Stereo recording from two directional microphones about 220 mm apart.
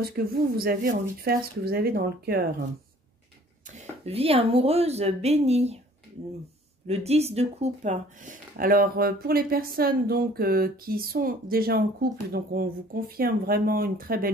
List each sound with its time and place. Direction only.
0.0 s speech: 45° right (ahead or behind)
3.7 s speech: 30° right (ahead or behind)
6.9 s speech: 30° right (ahead or behind)